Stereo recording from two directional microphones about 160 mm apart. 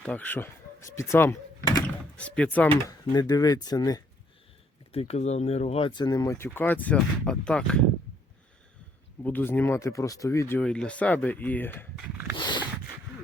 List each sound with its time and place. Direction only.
0.0 s speech: 10° left (ahead or behind)
2.1 s speech: 5° left (ahead or behind)
3.1 s speech: 25° left (ahead or behind)
4.9 s speech: 40° left (ahead or behind); by 7.9 s 5° left (ahead or behind)
9.2 s speech: 10° left (ahead or behind)
12.4 s a sound: 30° left (ahead or behind)